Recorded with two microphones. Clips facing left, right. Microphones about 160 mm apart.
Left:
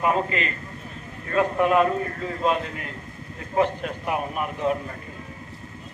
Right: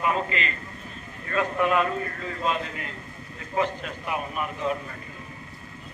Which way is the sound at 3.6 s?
55° left (ahead or behind).